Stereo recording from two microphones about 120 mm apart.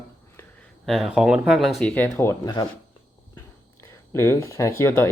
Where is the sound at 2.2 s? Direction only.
20° left (ahead or behind).